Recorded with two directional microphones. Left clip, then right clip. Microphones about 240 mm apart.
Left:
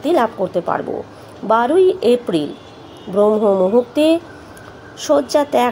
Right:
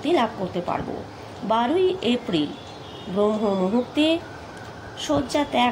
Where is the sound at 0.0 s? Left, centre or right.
Left.